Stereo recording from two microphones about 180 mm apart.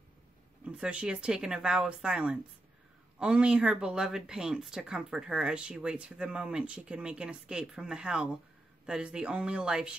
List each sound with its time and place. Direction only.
0.7 s speech: 5° right (ahead or behind)